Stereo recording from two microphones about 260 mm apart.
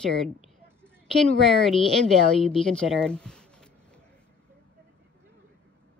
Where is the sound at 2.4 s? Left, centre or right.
Centre.